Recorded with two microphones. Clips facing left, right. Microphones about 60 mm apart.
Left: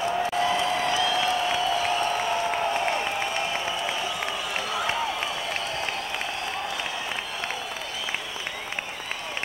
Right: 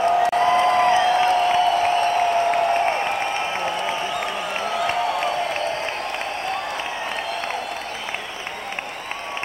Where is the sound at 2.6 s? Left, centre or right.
Right.